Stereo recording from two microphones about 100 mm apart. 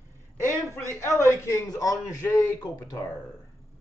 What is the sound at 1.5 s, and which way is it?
Speech, 40° left (ahead or behind).